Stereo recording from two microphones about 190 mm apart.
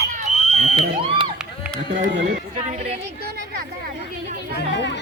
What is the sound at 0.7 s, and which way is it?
Crowd, 30° right (ahead or behind).